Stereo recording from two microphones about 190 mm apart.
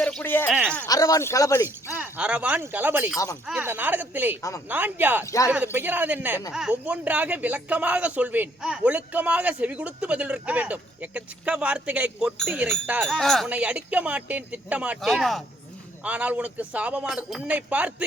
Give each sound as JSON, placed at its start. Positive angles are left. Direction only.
{"t": 0.0, "sound": "speech", "side_deg": 5}
{"t": 2.0, "sound": "speech", "side_deg": -5}
{"t": 4.4, "sound": "speech", "side_deg": 15}
{"t": 4.7, "sound": "speech", "side_deg": -10}
{"t": 5.2, "sound": "speech", "side_deg": 15}
{"t": 5.5, "sound": "speech", "side_deg": -10}